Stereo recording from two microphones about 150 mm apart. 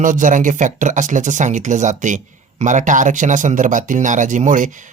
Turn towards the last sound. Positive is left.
turn(degrees=-60)  # may be behind; listen again after turning